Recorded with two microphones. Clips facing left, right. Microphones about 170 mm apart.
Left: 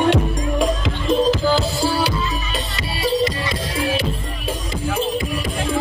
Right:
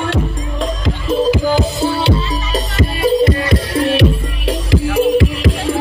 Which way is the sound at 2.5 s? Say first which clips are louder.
Right 8 dB; 50° right (ahead or behind).